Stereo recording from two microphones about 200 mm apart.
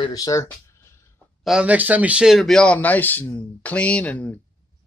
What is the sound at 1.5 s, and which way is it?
Speech, 5° right (ahead or behind).